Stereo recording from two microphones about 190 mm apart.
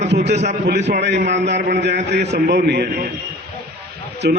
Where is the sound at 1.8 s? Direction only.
65° right (ahead or behind).